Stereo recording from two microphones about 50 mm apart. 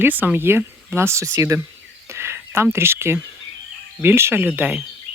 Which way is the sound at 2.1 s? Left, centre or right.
Right.